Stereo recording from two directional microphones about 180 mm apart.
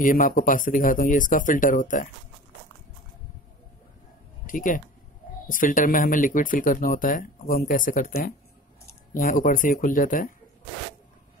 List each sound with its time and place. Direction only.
0.0 s speech: 50° left (ahead or behind)
4.5 s speech: 50° left (ahead or behind)